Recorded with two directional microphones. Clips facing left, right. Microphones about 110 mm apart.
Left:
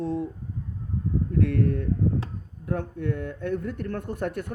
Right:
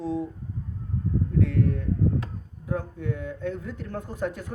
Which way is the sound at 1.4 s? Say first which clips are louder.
Left 2 dB; 55° left (ahead or behind).